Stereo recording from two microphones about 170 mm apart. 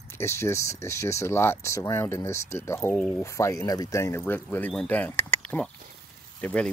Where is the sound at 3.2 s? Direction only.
15° left (ahead or behind).